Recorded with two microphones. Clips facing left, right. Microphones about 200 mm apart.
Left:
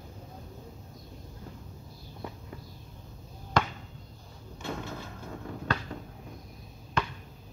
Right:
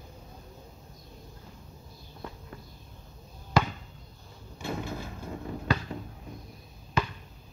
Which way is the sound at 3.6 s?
5° right (ahead or behind).